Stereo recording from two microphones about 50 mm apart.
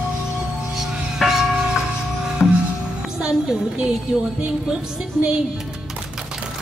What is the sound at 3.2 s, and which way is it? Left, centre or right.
Music, centre.